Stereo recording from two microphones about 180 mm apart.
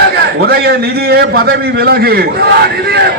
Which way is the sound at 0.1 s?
60° right (ahead or behind).